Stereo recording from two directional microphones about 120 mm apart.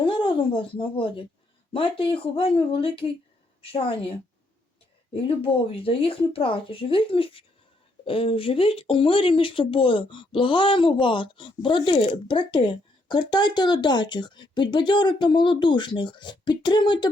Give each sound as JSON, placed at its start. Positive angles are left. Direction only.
{"t": 0.0, "sound": "speech", "side_deg": 45}
{"t": 5.1, "sound": "speech", "side_deg": 50}